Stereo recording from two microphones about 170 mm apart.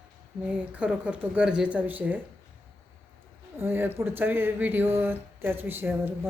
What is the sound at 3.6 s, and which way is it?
Speech, 15° right (ahead or behind).